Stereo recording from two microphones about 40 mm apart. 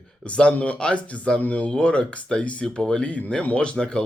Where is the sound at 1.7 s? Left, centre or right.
Left.